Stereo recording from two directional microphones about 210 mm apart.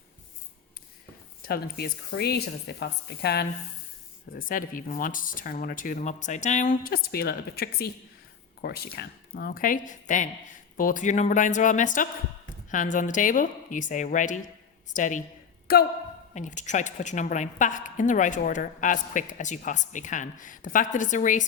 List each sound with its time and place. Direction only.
1.5 s a woman's voice: 45° left (ahead or behind)
16.3 s a woman's voice: 35° left (ahead or behind)